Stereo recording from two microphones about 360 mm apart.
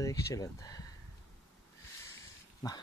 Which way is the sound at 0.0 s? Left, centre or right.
Centre.